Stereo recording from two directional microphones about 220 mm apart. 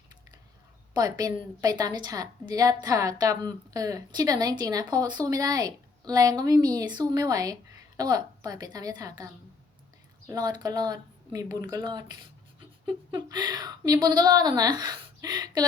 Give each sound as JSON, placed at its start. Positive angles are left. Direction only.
{"t": 0.9, "sound": "a woman's voice", "side_deg": -15}